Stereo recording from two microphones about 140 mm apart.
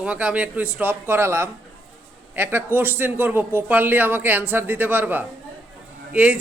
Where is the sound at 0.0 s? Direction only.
10° right (ahead or behind).